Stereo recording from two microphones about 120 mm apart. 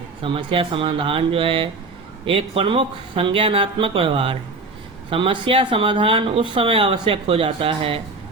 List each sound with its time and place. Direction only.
0.2 s speech: 50° right (ahead or behind)